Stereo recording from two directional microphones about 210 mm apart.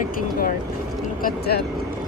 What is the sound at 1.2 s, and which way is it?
Speech, 50° left (ahead or behind).